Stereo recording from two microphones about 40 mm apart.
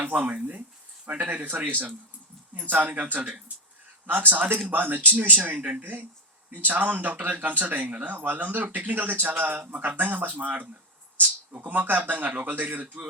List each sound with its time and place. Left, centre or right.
0.1 s speech: right
1.3 s speech: right
2.6 s speech: right
12.8 s speech: right